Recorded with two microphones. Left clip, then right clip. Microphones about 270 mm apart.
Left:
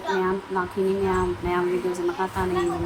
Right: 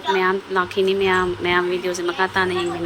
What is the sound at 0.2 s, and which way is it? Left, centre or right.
Speech, centre.